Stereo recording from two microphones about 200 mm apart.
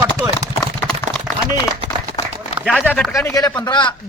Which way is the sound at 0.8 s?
5° right (ahead or behind).